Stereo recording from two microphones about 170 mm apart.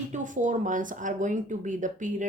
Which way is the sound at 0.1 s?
45° right (ahead or behind).